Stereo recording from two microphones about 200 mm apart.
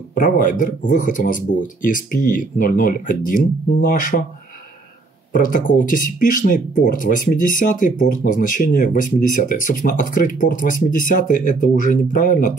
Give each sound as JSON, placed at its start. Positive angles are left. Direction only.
{"t": 0.1, "sound": "speech", "side_deg": 40}
{"t": 5.3, "sound": "speech", "side_deg": 40}